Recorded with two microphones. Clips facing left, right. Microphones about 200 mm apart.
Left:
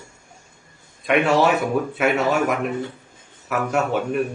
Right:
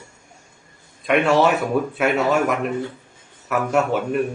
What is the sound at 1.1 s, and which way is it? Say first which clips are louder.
Speech: right 1 dB; centre (ahead or behind).